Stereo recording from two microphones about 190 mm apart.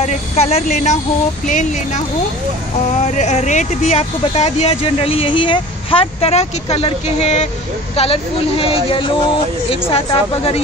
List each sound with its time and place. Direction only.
0.0 s speech: 35° left (ahead or behind)
3.0 s speech: 35° left (ahead or behind)